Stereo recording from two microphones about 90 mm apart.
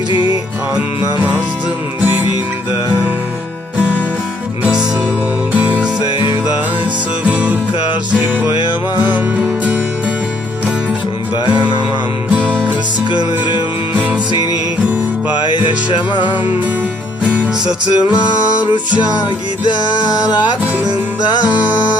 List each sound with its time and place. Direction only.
4.6 s music: 10° right (ahead or behind)
7.3 s music: 15° right (ahead or behind)
9.0 s music: 15° right (ahead or behind)
12.3 s music: 15° right (ahead or behind)
15.9 s music: 60° left (ahead or behind)
17.3 s music: 15° right (ahead or behind)